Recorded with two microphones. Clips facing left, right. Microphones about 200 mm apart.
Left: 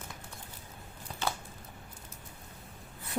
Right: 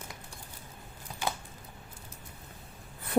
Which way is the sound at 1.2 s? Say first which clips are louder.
Even; 10° right (ahead or behind).